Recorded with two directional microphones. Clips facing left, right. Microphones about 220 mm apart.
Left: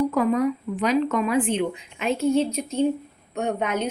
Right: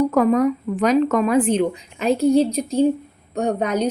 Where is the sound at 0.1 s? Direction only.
45° right (ahead or behind).